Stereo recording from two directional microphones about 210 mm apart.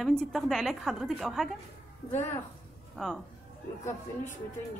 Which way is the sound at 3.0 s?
5° left (ahead or behind).